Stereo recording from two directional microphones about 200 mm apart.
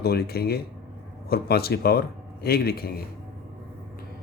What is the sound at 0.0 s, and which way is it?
A man's voice, 50° left (ahead or behind).